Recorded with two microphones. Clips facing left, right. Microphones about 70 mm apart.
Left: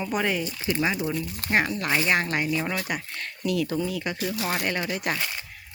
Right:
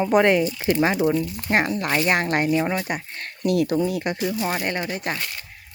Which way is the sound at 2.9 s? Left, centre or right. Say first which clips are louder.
Right 3 dB; right.